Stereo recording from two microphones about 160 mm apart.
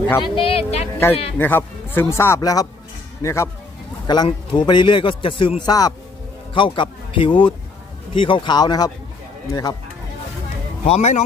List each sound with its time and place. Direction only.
0.2 s speech: 35° left (ahead or behind)
1.4 s a man's voice: 15° left (ahead or behind)
10.8 s speech: 45° left (ahead or behind)